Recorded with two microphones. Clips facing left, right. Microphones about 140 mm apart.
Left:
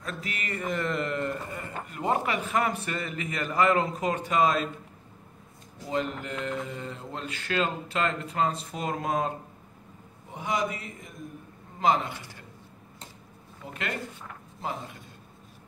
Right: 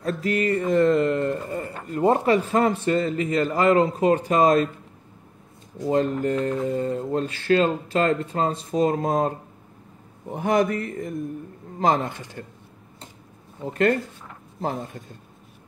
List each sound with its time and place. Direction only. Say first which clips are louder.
0.0 s speech: right 13 dB; 35° right (ahead or behind)
5.9 s speech: right 9 dB; 45° right (ahead or behind)
10.3 s mantra: right 9 dB; 55° right (ahead or behind)
11.8 s a man's voice: right 3 dB; 45° right (ahead or behind)
14.6 s a man's voice: right 7 dB; 45° right (ahead or behind)